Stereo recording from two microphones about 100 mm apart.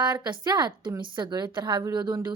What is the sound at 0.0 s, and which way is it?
Speech, 50° right (ahead or behind).